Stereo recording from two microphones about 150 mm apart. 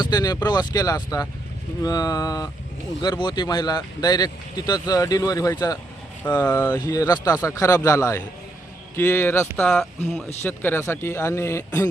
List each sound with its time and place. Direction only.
0.0 s speech: 25° left (ahead or behind)
6.7 s speech: 25° left (ahead or behind)
9.6 s speech: centre (ahead or behind)
10.4 s speech: 15° left (ahead or behind)